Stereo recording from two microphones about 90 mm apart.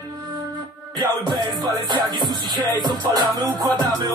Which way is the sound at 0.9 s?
55° right (ahead or behind).